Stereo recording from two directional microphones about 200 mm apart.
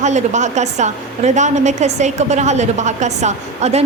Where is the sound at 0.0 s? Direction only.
35° right (ahead or behind).